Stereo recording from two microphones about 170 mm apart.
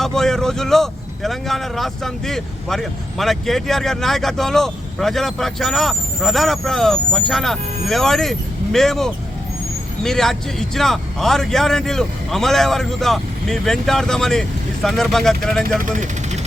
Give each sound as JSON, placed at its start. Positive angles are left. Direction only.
{"t": 0.0, "sound": "speech", "side_deg": 5}
{"t": 15.8, "sound": "speech", "side_deg": -50}